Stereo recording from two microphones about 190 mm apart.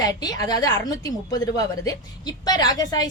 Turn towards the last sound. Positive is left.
turn(degrees=20)  # may be behind; listen again after turning